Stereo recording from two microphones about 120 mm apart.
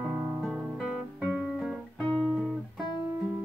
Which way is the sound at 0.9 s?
5° right (ahead or behind).